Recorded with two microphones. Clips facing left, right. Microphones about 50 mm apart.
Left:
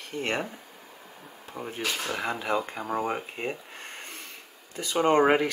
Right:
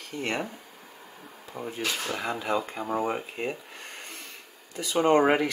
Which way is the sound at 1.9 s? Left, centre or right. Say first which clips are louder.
Even; centre.